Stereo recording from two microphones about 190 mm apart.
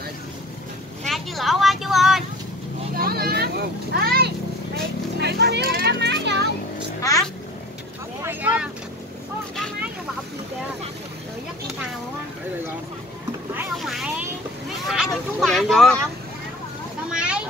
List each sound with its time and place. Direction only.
1.0 s vehicle: centre (ahead or behind)
3.0 s children playing: 55° right (ahead or behind)
3.9 s a sound: 55° right (ahead or behind)
5.2 s speech: 60° right (ahead or behind)
7.0 s speech: 15° left (ahead or behind)
8.2 s vehicle: 10° right (ahead or behind)
13.7 s vehicle: centre (ahead or behind)
14.9 s speech: centre (ahead or behind)
17.1 s a sound: 5° right (ahead or behind)